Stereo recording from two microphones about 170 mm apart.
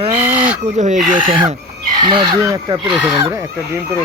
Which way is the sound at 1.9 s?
25° right (ahead or behind).